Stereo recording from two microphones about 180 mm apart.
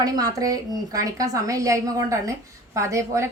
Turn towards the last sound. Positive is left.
turn(degrees=-15)  # may be behind; listen again after turning